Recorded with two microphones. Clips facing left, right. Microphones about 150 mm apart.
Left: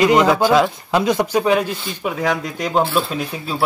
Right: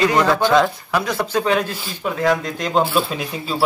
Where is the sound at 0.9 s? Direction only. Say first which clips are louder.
Left 4 dB; 20° left (ahead or behind).